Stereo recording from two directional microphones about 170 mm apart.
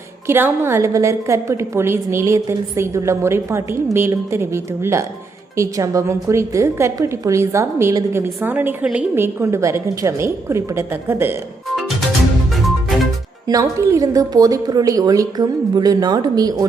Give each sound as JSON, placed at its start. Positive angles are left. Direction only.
{"t": 0.3, "sound": "a woman's voice", "side_deg": -15}
{"t": 13.5, "sound": "a woman's voice", "side_deg": -20}